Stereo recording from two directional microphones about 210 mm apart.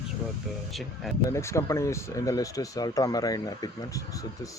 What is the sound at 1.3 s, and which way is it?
Speech, 15° left (ahead or behind).